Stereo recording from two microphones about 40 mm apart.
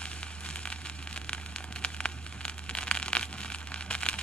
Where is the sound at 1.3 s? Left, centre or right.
Left.